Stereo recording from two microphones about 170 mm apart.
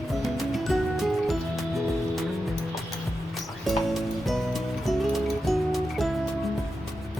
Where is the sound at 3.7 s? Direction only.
Centre (ahead or behind).